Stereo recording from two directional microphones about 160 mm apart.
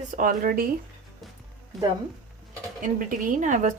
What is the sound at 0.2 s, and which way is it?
Speech, 60° right (ahead or behind).